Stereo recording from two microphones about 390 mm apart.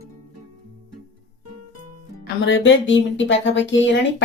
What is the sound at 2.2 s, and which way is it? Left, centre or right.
Speech, left.